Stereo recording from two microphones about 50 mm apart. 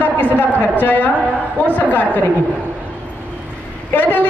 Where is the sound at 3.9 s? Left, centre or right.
Left.